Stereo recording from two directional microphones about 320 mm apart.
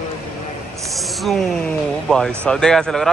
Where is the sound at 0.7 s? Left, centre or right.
Centre.